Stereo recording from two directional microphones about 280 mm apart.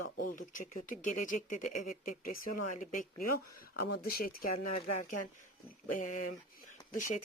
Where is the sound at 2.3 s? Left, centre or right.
Left.